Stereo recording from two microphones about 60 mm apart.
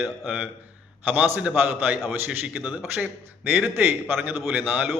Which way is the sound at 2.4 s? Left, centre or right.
Centre.